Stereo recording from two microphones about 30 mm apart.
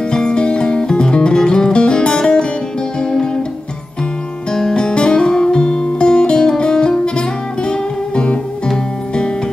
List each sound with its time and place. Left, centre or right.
0.1 s music: left
4.5 s music: centre
4.7 s music: left